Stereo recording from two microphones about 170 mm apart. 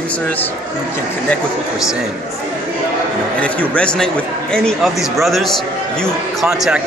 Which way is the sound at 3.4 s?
5° left (ahead or behind).